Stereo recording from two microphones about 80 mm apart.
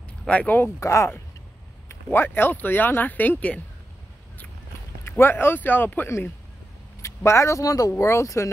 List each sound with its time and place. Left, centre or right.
0.3 s speech: centre
0.7 s speech: left; by 3.6 s centre
5.0 s speech: left
7.0 s speech: left